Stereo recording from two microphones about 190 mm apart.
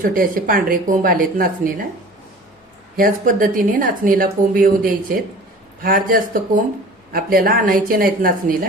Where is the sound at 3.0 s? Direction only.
45° right (ahead or behind).